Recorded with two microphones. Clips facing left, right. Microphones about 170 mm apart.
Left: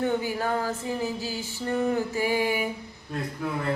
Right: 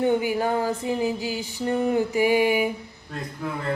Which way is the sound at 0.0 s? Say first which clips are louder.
Right 4 dB; 15° right (ahead or behind).